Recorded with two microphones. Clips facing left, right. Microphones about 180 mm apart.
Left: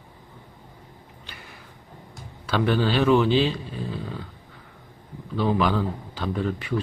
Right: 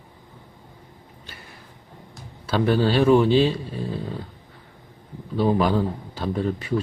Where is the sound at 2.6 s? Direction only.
35° right (ahead or behind).